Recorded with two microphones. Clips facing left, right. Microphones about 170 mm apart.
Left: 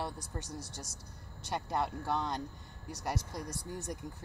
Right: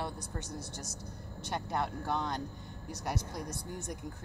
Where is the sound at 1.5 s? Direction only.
5° left (ahead or behind).